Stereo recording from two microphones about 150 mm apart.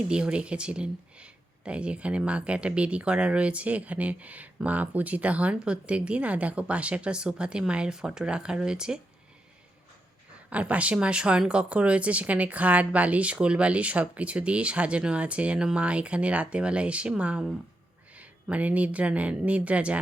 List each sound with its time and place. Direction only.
0.1 s speech: 5° right (ahead or behind)
10.5 s speech: 10° right (ahead or behind)